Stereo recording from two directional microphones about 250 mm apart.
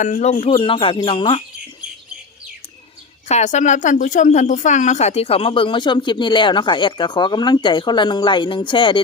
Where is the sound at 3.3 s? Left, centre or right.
Left.